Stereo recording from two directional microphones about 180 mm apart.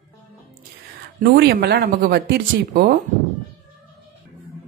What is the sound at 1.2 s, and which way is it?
Speech, 60° right (ahead or behind).